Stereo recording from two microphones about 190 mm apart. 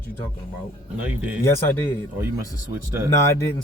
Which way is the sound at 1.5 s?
15° left (ahead or behind).